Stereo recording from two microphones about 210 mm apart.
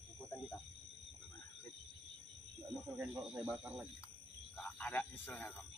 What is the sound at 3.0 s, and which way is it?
Speech, 10° right (ahead or behind).